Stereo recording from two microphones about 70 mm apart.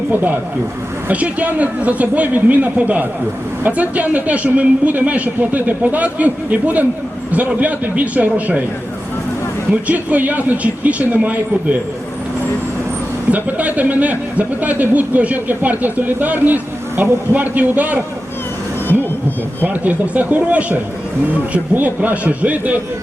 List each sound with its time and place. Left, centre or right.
0.1 s speech: right
9.8 s speech: right
13.3 s speech: right
19.6 s speech: right